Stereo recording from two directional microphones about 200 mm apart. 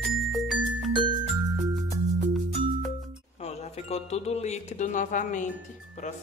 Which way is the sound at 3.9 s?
30° left (ahead or behind).